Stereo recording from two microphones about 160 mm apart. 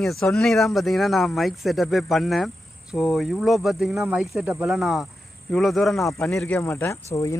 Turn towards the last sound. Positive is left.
turn(degrees=20)  # may be behind; listen again after turning